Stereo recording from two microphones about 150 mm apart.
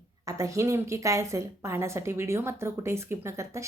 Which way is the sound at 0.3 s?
20° right (ahead or behind).